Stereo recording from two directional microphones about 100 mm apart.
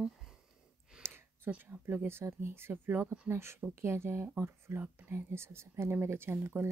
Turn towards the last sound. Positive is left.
turn(degrees=-25)  # may be behind; listen again after turning